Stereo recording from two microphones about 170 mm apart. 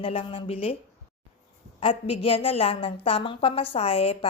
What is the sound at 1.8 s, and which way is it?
A woman's voice, 35° left (ahead or behind).